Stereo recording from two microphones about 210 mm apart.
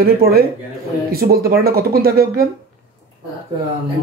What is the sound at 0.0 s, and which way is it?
Speech, 45° right (ahead or behind).